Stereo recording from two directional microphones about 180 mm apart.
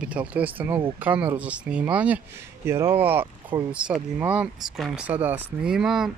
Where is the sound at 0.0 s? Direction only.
5° right (ahead or behind).